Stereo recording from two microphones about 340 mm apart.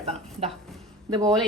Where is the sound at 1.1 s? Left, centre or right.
Centre.